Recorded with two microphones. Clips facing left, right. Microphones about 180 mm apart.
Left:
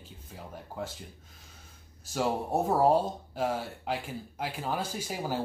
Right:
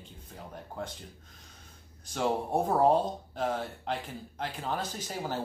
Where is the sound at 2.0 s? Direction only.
5° left (ahead or behind).